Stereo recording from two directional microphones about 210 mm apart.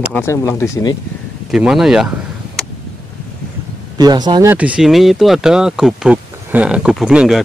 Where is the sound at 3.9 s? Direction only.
20° right (ahead or behind).